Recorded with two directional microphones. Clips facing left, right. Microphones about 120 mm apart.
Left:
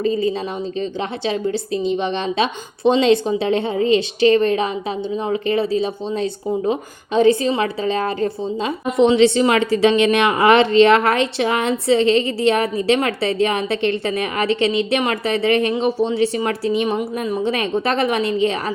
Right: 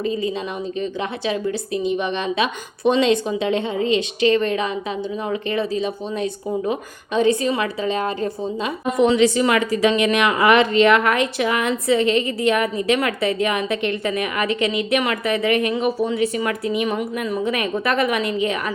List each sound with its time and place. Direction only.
0.0 s a woman's voice: 35° left (ahead or behind)